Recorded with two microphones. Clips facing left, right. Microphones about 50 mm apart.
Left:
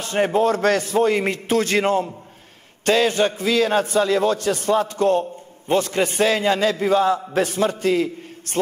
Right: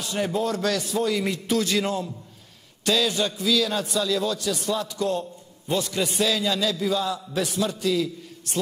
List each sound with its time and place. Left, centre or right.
0.0 s a man's voice: left